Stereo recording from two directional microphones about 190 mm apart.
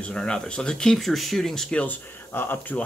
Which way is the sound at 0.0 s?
5° left (ahead or behind).